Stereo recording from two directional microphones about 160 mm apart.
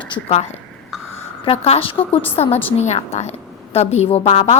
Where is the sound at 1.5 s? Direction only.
40° left (ahead or behind).